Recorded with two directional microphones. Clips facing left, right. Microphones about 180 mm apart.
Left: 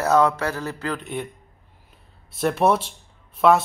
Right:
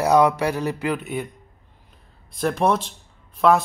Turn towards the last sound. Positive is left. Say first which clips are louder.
# even
turn(degrees=0)  # may be behind; listen again after turning